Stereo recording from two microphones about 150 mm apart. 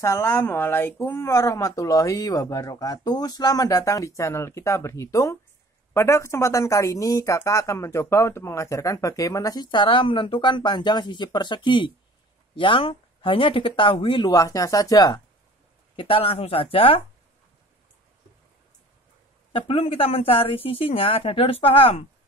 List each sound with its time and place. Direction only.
0.0 s speech: 20° left (ahead or behind)
16.0 s speech: 35° left (ahead or behind)
19.5 s speech: 35° left (ahead or behind)